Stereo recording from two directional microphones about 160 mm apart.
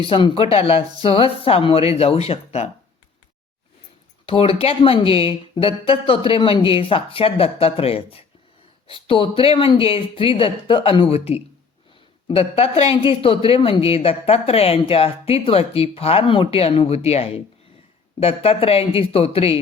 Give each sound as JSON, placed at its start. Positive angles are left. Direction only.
{"t": 0.1, "sound": "speech", "side_deg": 35}
{"t": 4.3, "sound": "speech", "side_deg": 35}